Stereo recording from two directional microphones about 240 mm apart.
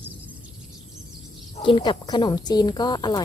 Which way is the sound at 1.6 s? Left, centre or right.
Centre.